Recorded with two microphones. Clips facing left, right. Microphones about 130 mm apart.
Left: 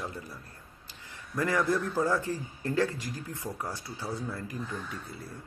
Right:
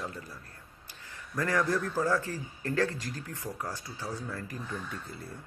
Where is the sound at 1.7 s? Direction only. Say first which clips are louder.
Left 1 dB; 15° left (ahead or behind).